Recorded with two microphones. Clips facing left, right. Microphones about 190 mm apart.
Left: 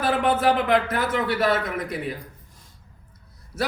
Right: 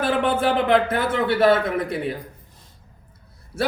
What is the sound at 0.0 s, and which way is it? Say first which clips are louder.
Speech: even; 30° right (ahead or behind).